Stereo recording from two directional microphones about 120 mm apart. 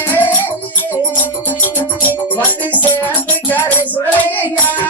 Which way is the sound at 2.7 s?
15° left (ahead or behind).